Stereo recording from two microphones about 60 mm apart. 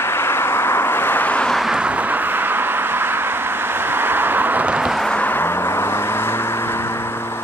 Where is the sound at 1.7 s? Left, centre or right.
Centre.